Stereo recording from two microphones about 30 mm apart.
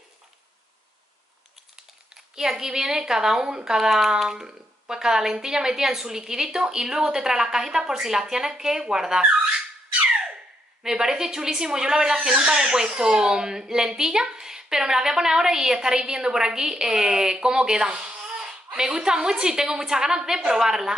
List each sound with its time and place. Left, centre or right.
2.3 s speech: centre
10.8 s speech: centre
18.2 s a sound: right
18.8 s speech: right